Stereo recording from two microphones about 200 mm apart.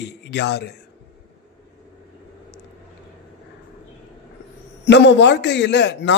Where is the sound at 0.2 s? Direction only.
60° left (ahead or behind).